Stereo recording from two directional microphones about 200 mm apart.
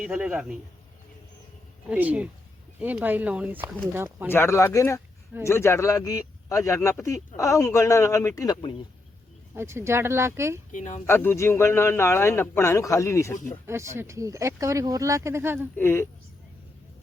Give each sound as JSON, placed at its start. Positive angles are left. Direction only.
{"t": 0.0, "sound": "speech", "side_deg": -5}
{"t": 1.9, "sound": "speech", "side_deg": -5}
{"t": 4.3, "sound": "speech", "side_deg": 15}
{"t": 9.6, "sound": "speech", "side_deg": -15}
{"t": 10.7, "sound": "speech", "side_deg": 40}
{"t": 11.0, "sound": "speech", "side_deg": 10}
{"t": 13.7, "sound": "speech", "side_deg": -15}
{"t": 15.7, "sound": "speech", "side_deg": 10}